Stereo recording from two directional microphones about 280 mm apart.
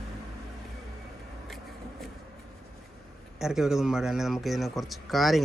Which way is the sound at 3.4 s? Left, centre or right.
Centre.